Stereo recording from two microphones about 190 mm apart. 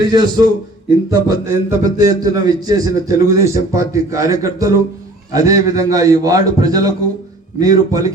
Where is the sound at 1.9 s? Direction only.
20° right (ahead or behind).